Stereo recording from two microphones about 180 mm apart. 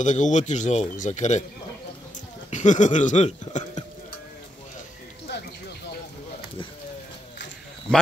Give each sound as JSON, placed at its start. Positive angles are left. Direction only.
{"t": 0.0, "sound": "speech", "side_deg": 45}
{"t": 2.5, "sound": "speech", "side_deg": 40}